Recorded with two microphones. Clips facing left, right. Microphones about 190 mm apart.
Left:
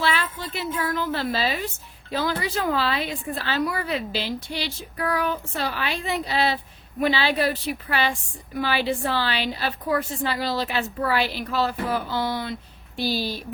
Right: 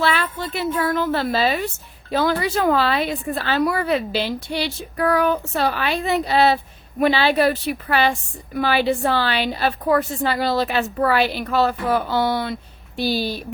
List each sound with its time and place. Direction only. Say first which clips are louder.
0.0 s a woman's voice: right 4 dB; 60° right (ahead or behind)
13.1 s a woman's voice: right 4 dB; 60° right (ahead or behind)